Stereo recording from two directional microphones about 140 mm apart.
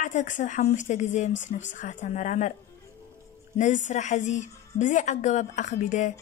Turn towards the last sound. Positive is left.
turn(degrees=60)  # may be behind; listen again after turning